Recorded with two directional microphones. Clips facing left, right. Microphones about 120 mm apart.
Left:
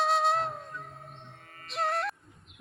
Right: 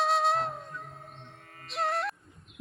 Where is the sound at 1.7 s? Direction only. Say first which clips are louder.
Even; centre (ahead or behind).